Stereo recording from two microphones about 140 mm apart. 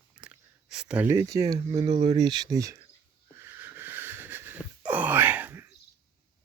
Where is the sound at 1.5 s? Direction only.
45° right (ahead or behind).